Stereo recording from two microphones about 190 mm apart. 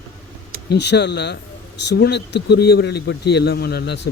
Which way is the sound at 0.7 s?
65° left (ahead or behind).